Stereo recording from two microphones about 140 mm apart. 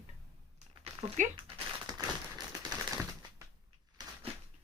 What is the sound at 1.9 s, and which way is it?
Tap, 30° right (ahead or behind).